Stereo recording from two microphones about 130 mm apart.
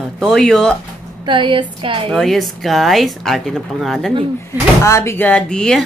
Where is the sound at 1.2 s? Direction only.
40° right (ahead or behind).